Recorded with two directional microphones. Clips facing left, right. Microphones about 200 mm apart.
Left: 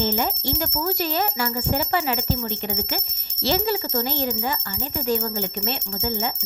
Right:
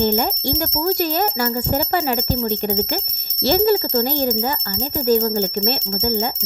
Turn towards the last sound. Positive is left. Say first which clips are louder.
# right 6 dB
turn(degrees=-40)  # may be behind; listen again after turning